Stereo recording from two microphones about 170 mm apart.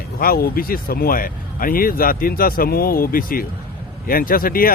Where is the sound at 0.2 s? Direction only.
60° left (ahead or behind).